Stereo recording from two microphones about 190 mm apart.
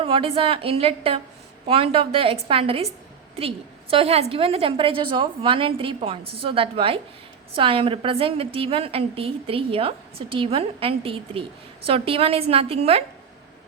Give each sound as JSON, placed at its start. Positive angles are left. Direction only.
{"t": 0.0, "sound": "a woman's voice", "side_deg": -30}